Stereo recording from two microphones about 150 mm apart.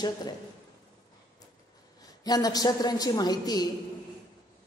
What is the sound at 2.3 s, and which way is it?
A woman's voice, 25° left (ahead or behind).